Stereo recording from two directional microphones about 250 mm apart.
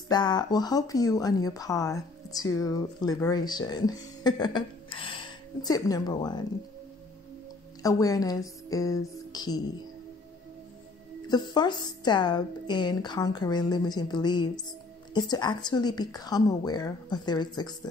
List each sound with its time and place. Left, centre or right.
0.1 s speech: centre
7.8 s speech: centre
11.2 s speech: centre